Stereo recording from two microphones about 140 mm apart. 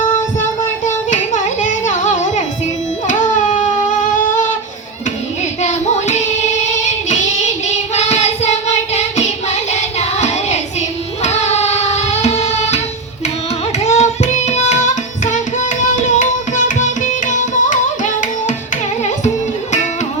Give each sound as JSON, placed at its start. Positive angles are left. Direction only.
{"t": 1.1, "sound": "carnatic music", "side_deg": 60}
{"t": 3.1, "sound": "a sound", "side_deg": 60}
{"t": 5.6, "sound": "music", "side_deg": 55}
{"t": 7.1, "sound": "child singing", "side_deg": 55}
{"t": 11.2, "sound": "music", "side_deg": 50}
{"t": 13.7, "sound": "hands", "side_deg": 55}
{"t": 16.1, "sound": "music", "side_deg": 60}